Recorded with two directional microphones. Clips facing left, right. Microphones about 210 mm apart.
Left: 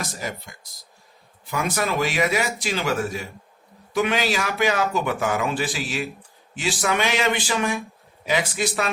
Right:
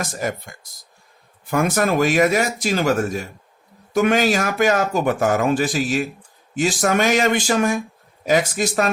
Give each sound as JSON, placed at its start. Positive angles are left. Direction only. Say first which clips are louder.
{"t": 0.0, "sound": "speech", "louder": "right 6 dB", "side_deg": -50}